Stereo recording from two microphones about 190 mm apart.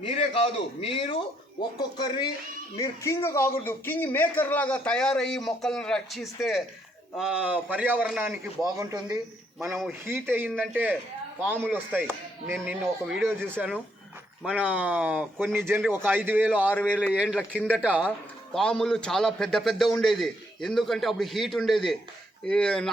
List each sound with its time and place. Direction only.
0.0 s a man's voice: 30° left (ahead or behind); by 6.6 s centre (ahead or behind)
7.2 s chopping: 5° right (ahead or behind)
8.6 s chopping: 20° right (ahead or behind)
12.6 s a man's voice: 5° right (ahead or behind)
14.4 s chopping: 5° right (ahead or behind)
16.7 s speech: 5° left (ahead or behind)
17.2 s a man's voice: 5° right (ahead or behind)
17.7 s chopping: 5° right (ahead or behind)
18.5 s a man's voice: 5° left (ahead or behind)